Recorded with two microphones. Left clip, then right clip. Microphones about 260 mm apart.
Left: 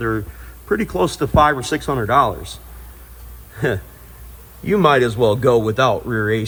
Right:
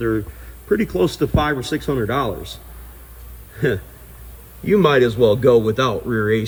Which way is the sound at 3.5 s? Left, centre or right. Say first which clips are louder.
Even; centre.